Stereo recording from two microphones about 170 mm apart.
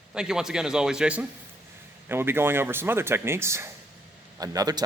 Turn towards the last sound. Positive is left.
turn(degrees=-20)  # may be behind; listen again after turning